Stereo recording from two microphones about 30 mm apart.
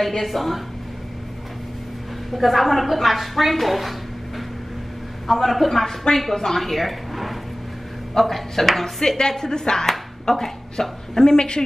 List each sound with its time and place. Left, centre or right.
0.2 s a woman's voice: centre
2.3 s a woman's voice: centre
5.3 s a woman's voice: centre
9.0 s a woman's voice: centre
11.3 s speech: left